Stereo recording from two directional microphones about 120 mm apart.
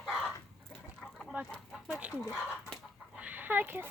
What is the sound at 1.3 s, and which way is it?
Speech, 15° right (ahead or behind).